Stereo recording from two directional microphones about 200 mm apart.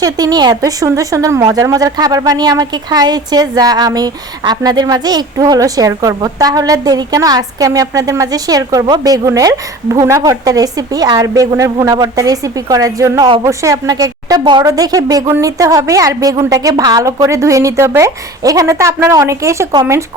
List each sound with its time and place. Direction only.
0.0 s a woman's voice: 20° right (ahead or behind)